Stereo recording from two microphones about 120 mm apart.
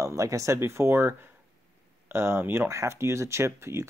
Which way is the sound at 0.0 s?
25° right (ahead or behind).